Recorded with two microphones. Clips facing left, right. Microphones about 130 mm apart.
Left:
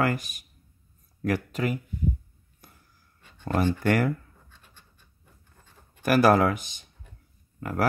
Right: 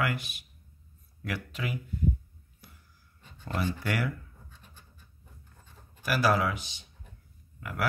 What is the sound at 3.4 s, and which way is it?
Speech, 50° left (ahead or behind).